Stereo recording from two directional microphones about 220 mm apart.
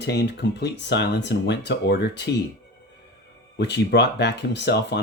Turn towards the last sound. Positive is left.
turn(degrees=50)  # may be behind; listen again after turning